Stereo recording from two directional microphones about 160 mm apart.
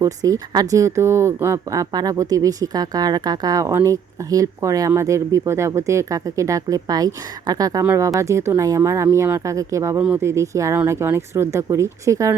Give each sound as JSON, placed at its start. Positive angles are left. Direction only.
{"t": 0.0, "sound": "speech", "side_deg": -20}